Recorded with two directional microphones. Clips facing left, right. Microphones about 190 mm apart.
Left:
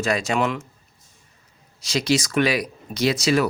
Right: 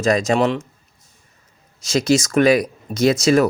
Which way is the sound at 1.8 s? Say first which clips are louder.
Right 5 dB; 45° right (ahead or behind).